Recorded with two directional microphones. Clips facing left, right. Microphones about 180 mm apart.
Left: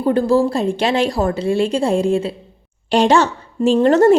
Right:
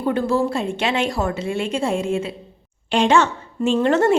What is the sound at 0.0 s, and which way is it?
A woman's voice, 35° left (ahead or behind).